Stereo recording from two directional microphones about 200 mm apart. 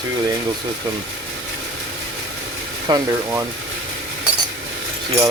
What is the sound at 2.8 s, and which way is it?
Speech, 20° right (ahead or behind).